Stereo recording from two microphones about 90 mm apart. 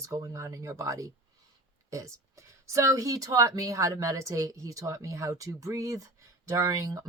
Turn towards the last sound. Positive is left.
turn(degrees=-40)  # may be behind; listen again after turning